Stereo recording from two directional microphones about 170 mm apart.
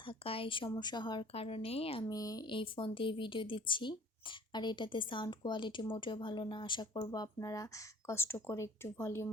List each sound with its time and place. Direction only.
0.0 s speech: 30° left (ahead or behind)
2.0 s speech: 20° left (ahead or behind)